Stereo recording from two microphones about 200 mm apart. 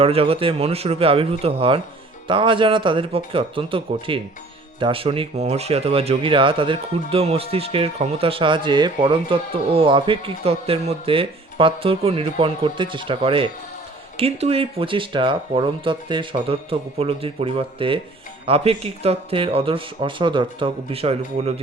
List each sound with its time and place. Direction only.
0.0 s speech: 30° right (ahead or behind)